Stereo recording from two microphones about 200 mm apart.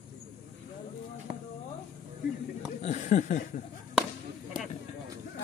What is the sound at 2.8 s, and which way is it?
Speech, 35° left (ahead or behind).